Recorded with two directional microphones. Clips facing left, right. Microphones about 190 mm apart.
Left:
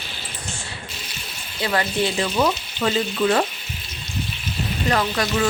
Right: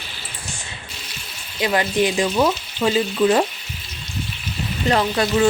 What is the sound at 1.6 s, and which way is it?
Frying, 15° right (ahead or behind).